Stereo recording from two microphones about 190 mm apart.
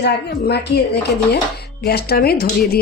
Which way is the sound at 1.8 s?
55° left (ahead or behind).